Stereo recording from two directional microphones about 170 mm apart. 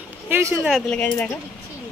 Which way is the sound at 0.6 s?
5° left (ahead or behind).